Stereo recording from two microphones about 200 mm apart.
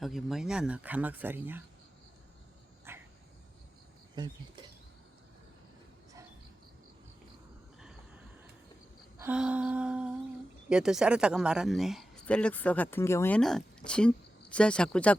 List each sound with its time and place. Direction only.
0.0 s speech: centre (ahead or behind)
2.9 s cricket: 10° right (ahead or behind)
4.1 s speech: 20° right (ahead or behind)
9.1 s speech: 10° right (ahead or behind)